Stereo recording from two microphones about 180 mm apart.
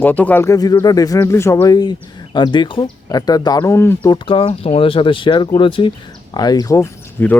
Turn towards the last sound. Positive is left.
turn(degrees=15)  # may be behind; listen again after turning